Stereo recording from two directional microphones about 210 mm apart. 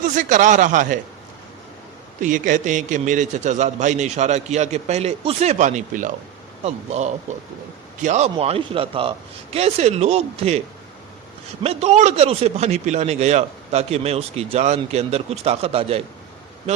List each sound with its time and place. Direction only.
0.0 s a man's voice: 40° right (ahead or behind)
2.2 s a man's voice: 40° right (ahead or behind)
11.6 s a man's voice: 30° right (ahead or behind)